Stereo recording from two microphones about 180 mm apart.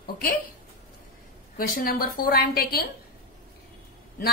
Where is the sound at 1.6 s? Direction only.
50° left (ahead or behind).